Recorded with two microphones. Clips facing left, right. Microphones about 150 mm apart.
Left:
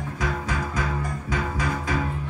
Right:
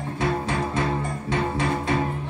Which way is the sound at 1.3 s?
30° right (ahead or behind).